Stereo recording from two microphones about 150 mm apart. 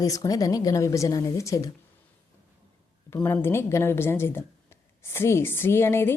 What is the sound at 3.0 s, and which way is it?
A woman's voice, 15° left (ahead or behind).